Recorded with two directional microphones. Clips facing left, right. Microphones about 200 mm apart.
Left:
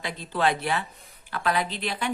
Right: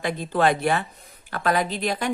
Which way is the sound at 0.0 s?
50° right (ahead or behind).